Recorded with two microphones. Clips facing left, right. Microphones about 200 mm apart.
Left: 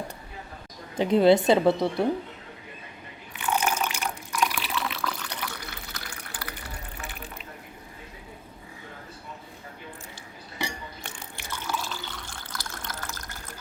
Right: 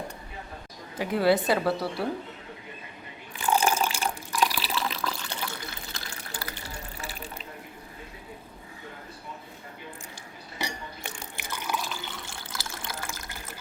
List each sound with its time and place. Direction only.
0.9 s speech: 25° left (ahead or behind)
3.4 s water: 35° right (ahead or behind)
11.3 s water: 15° right (ahead or behind)
12.5 s water: 10° right (ahead or behind)